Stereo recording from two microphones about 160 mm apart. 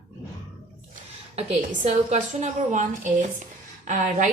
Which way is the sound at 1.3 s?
45° right (ahead or behind).